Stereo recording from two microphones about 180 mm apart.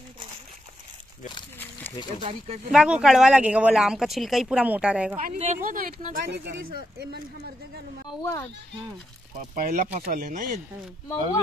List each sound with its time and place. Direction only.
1.6 s a sound: 10° left (ahead or behind)
2.2 s speech: 35° right (ahead or behind)
2.7 s speech: 5° right (ahead or behind)
5.1 s speech: 45° right (ahead or behind)
8.2 s speech: 15° left (ahead or behind)
9.4 s speech: 45° right (ahead or behind)